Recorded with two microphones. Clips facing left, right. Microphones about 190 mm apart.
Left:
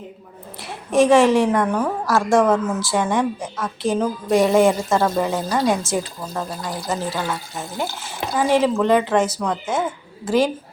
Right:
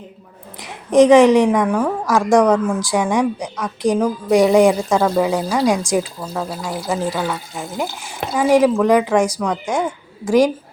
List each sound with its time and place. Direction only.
0.6 s a woman's voice: 20° right (ahead or behind)
4.9 s speech: 5° right (ahead or behind)
6.3 s speech: 5° right (ahead or behind)